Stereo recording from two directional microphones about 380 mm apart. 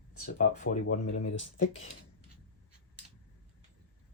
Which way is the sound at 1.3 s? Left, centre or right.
Centre.